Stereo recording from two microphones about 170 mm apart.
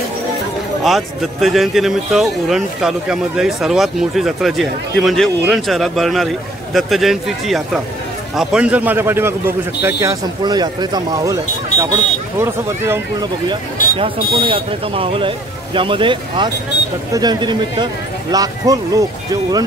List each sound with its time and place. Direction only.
0.8 s speech: centre (ahead or behind)
13.9 s speech: 30° right (ahead or behind)